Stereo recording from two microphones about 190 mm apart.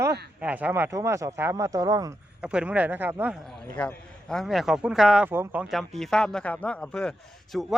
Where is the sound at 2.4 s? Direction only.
5° right (ahead or behind).